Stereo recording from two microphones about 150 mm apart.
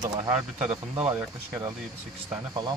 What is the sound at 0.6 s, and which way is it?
Speech, 10° right (ahead or behind).